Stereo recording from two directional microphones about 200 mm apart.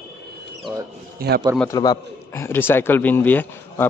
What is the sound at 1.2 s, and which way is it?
Speech, 50° right (ahead or behind).